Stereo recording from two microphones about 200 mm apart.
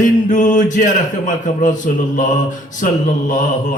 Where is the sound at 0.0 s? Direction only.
40° left (ahead or behind).